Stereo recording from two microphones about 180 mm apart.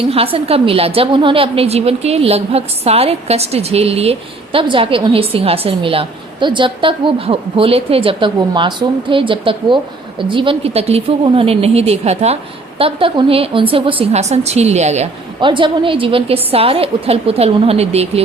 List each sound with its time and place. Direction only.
0.0 s a woman's voice: 30° right (ahead or behind)
15.4 s a woman's voice: 25° right (ahead or behind)